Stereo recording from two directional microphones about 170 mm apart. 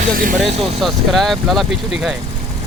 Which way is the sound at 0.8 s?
Centre (ahead or behind).